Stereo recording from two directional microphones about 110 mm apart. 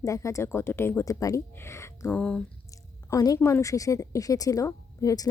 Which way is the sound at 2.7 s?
35° left (ahead or behind).